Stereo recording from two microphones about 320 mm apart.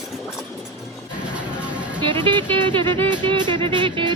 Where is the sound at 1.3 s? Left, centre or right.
Centre.